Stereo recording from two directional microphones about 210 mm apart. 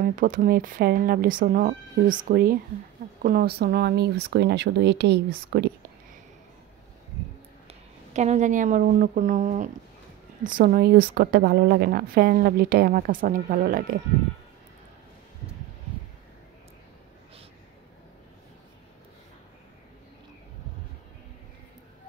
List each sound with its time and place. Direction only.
0.0 s a woman's voice: 40° right (ahead or behind)
7.6 s a woman's voice: 30° right (ahead or behind)